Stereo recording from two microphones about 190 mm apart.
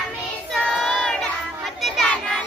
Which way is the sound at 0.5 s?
Centre (ahead or behind).